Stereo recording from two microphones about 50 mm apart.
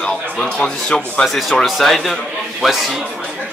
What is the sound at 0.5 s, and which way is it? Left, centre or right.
Speech, centre.